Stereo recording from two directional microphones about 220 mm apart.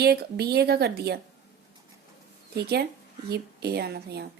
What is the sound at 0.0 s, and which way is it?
Speech, 45° right (ahead or behind).